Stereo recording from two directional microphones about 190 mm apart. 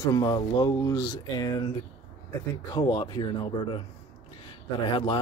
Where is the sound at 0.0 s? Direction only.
20° left (ahead or behind).